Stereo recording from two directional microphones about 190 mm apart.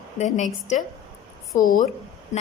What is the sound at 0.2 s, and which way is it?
A woman's voice, 40° left (ahead or behind).